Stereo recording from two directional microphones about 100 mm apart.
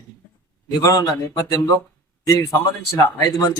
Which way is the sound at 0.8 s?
35° left (ahead or behind).